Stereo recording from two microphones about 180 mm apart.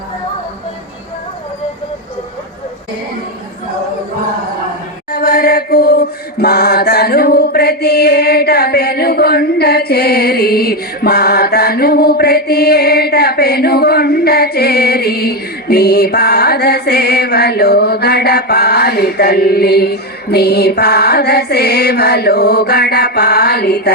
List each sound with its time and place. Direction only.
5.1 s mantra: 60° left (ahead or behind)